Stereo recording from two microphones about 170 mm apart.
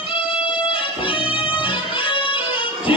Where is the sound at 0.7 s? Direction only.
30° left (ahead or behind).